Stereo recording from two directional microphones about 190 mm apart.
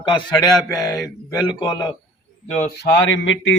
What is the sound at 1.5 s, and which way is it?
Speech, 25° left (ahead or behind).